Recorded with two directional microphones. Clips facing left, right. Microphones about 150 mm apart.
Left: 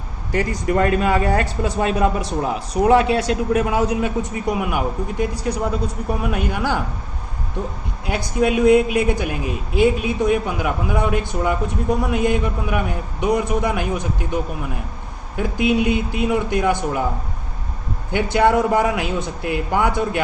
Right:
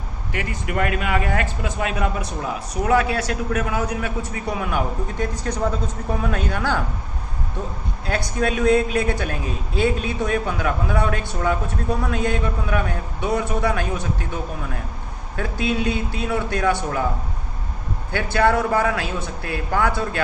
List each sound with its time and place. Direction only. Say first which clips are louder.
0.3 s a man's voice: left 8 dB; 40° left (ahead or behind); by 6.8 s 10° left (ahead or behind)
8.0 s a man's voice: left 3 dB; 15° left (ahead or behind)
15.4 s a man's voice: left 5 dB; 15° left (ahead or behind)
18.1 s a man's voice: left 3 dB; 15° left (ahead or behind)